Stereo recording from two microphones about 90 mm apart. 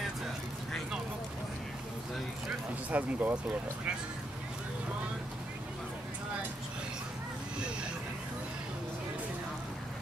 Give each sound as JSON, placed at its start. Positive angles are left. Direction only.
{"t": 2.4, "sound": "speech", "side_deg": -15}